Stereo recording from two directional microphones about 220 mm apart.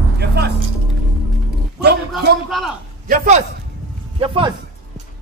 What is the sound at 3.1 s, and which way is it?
A man's voice, 30° right (ahead or behind).